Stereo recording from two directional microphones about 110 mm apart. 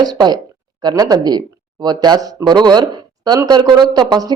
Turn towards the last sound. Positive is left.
turn(degrees=-40)  # may be behind; listen again after turning